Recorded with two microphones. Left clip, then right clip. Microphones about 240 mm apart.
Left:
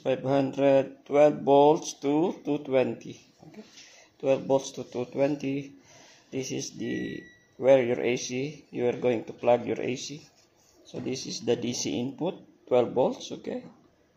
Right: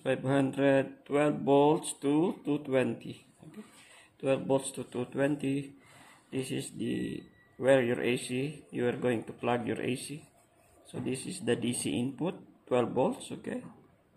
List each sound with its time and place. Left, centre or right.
0.0 s speech: centre
4.2 s speech: centre
6.8 s speech: centre
11.1 s speech: right
11.4 s speech: centre